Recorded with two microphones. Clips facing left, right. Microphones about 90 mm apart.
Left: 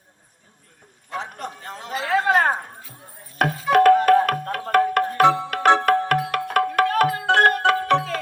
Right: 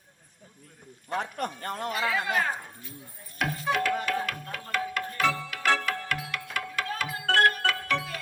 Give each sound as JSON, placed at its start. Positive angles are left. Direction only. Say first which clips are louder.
{"t": 1.4, "sound": "speech", "louder": "right 2 dB", "side_deg": -55}
{"t": 2.0, "sound": "a sound", "louder": "left 11 dB", "side_deg": 55}
{"t": 3.3, "sound": "music", "louder": "left 10 dB", "side_deg": 50}
{"t": 5.2, "sound": "music", "louder": "left 10 dB", "side_deg": 20}
{"t": 5.5, "sound": "music", "louder": "left 10 dB", "side_deg": 55}
{"t": 6.1, "sound": "tabla", "louder": "left 12 dB", "side_deg": 55}